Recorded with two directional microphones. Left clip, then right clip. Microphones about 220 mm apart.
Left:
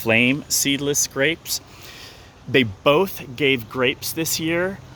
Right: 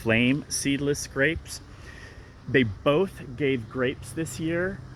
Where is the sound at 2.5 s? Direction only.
15° left (ahead or behind).